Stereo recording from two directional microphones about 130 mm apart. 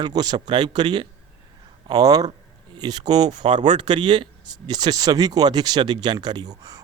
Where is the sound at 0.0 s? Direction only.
30° right (ahead or behind).